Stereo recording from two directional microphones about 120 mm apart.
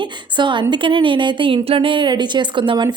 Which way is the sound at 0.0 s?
40° right (ahead or behind).